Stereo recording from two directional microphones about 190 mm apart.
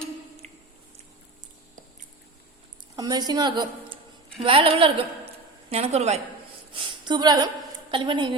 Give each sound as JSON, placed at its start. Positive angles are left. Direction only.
{"t": 0.4, "sound": "squish", "side_deg": -35}
{"t": 2.9, "sound": "a woman's voice", "side_deg": -20}
{"t": 6.7, "sound": "a woman's voice", "side_deg": -20}